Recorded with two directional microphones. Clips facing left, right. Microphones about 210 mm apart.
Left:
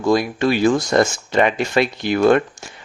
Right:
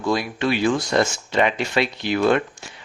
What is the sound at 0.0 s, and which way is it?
Speech, 45° left (ahead or behind).